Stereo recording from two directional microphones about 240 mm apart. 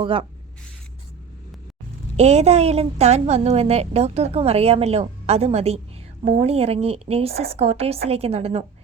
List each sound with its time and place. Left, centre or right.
0.0 s a woman's voice: right
2.1 s a woman's voice: right